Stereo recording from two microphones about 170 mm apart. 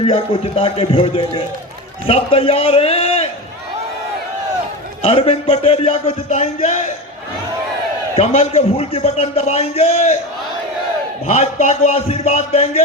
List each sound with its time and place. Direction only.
0.0 s a man's voice: 35° left (ahead or behind)
5.0 s a man's voice: 35° left (ahead or behind)
8.1 s a man's voice: 35° left (ahead or behind)
11.3 s a man's voice: 40° left (ahead or behind)